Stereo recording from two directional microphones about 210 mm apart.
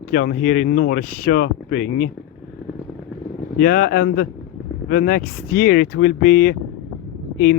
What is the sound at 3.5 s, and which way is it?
Speech, 45° left (ahead or behind).